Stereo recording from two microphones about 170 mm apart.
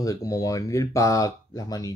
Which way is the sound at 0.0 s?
20° left (ahead or behind).